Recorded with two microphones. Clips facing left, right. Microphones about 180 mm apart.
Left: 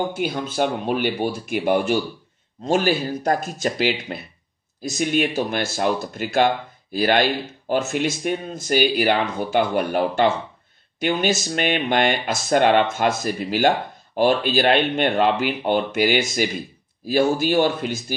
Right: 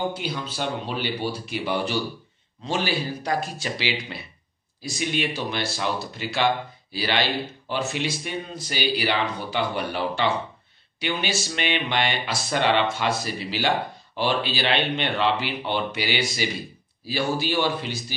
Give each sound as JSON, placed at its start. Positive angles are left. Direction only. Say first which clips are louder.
{"t": 0.1, "sound": "speech", "louder": "left 6 dB", "side_deg": 50}